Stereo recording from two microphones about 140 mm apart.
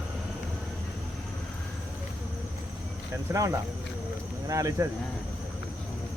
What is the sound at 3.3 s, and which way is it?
Speech, 20° right (ahead or behind).